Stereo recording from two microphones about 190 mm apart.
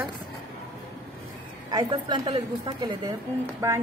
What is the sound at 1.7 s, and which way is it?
A woman's voice, 20° right (ahead or behind).